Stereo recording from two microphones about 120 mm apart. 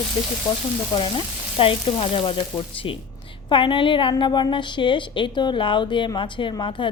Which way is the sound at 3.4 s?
45° left (ahead or behind).